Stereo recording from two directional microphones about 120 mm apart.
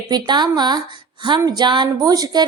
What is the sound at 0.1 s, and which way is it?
A woman's voice, 35° right (ahead or behind).